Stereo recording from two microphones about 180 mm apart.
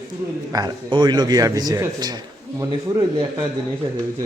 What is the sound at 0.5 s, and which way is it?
A man's voice, 25° right (ahead or behind).